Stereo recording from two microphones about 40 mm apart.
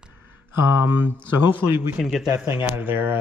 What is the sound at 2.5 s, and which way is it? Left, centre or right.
Speech, right.